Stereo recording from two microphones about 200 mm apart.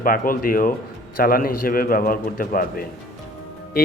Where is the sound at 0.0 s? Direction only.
45° left (ahead or behind).